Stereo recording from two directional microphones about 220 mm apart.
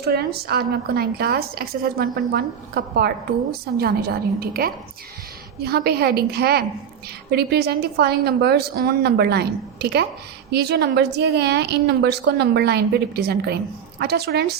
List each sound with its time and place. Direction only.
0.0 s speech: 45° right (ahead or behind)